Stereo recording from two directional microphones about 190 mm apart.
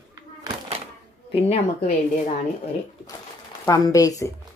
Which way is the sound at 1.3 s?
30° left (ahead or behind).